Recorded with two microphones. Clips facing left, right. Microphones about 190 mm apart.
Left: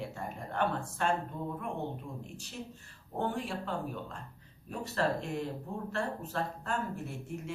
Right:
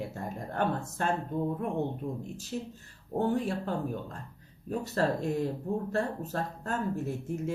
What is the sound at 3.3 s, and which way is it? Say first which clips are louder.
Speech: right 6 dB; 40° right (ahead or behind).